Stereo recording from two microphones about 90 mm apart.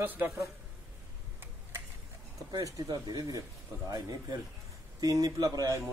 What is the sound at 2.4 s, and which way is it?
A man's voice, 45° right (ahead or behind).